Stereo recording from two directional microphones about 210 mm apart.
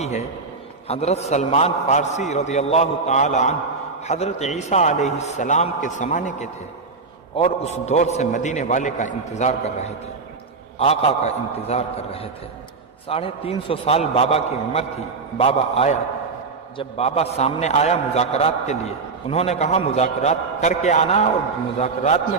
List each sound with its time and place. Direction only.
0.0 s a man's voice: 30° left (ahead or behind)